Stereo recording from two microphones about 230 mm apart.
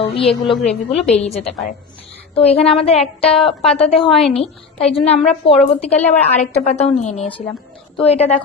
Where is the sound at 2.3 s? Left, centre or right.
Left.